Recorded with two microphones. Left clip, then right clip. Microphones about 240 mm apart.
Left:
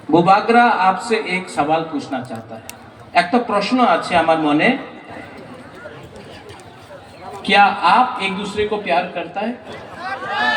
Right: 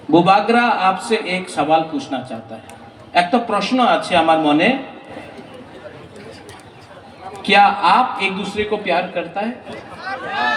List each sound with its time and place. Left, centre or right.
0.1 s a man's voice: right
7.4 s a man's voice: right